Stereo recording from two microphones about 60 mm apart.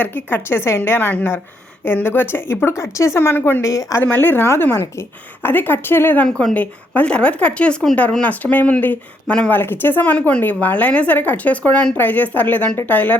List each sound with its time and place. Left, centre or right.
0.0 s a woman's voice: left
0.9 s a woman's voice: left
2.6 s speech: left
3.6 s speech: left
4.0 s a woman's voice: left
6.2 s speech: centre
6.5 s speech: left
8.2 s speech: left